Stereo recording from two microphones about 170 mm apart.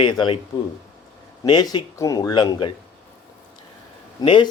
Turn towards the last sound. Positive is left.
turn(degrees=30)  # may be behind; listen again after turning